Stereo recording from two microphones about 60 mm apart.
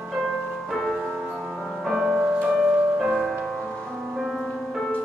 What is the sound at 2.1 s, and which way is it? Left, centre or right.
Music, centre.